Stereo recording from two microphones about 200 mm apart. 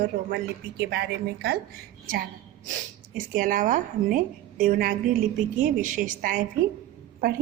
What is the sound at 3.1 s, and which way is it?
A woman's voice, 40° right (ahead or behind).